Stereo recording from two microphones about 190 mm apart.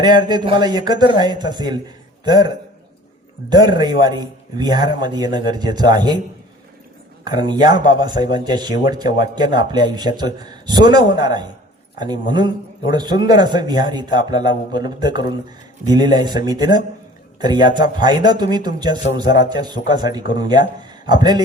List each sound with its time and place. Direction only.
0.0 s speech: 20° right (ahead or behind)
3.5 s speech: 20° right (ahead or behind)
7.3 s speech: 25° right (ahead or behind)